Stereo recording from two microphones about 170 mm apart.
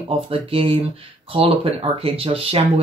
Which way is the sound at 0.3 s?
35° right (ahead or behind).